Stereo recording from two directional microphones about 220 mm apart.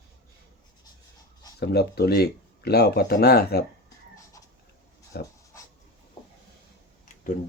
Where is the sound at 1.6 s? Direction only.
45° left (ahead or behind).